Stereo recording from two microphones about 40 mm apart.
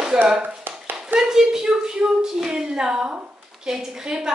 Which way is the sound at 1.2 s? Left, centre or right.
Centre.